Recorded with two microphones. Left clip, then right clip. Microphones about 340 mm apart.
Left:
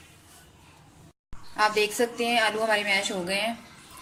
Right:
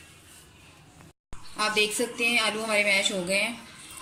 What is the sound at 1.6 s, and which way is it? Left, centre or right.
A woman's voice, left.